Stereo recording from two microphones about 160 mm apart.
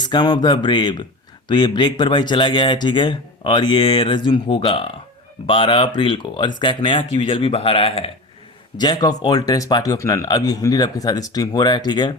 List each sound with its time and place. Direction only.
0.0 s speech: 25° left (ahead or behind)